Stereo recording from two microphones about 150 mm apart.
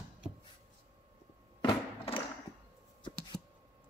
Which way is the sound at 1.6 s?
30° left (ahead or behind).